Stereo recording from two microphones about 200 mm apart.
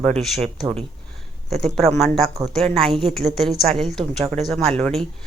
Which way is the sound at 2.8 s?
Centre (ahead or behind).